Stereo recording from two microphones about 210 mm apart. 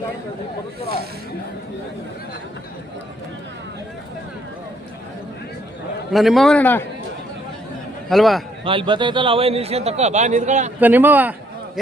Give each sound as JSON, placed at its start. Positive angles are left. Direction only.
{"t": 6.1, "sound": "a man's voice", "side_deg": 0}
{"t": 8.1, "sound": "a man's voice", "side_deg": 0}
{"t": 8.6, "sound": "a man's voice", "side_deg": -25}
{"t": 10.8, "sound": "speech", "side_deg": -10}